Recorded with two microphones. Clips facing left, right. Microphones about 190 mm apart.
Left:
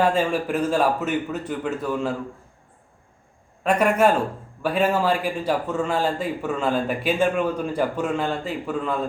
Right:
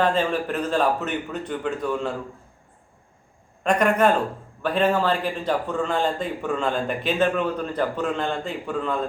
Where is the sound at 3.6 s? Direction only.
5° left (ahead or behind).